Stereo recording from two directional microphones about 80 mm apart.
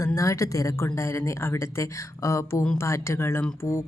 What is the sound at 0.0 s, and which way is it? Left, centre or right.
Speech, left.